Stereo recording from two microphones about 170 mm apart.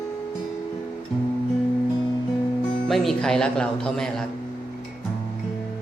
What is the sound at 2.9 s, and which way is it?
A man's voice, centre (ahead or behind).